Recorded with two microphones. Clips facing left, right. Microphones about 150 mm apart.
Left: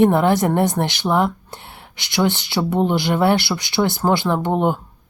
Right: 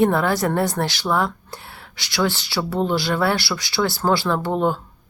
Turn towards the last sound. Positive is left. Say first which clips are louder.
# left 2 dB
turn(degrees=20)  # may be behind; listen again after turning